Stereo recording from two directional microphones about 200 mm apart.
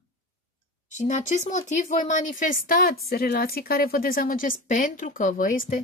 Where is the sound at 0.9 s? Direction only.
40° left (ahead or behind).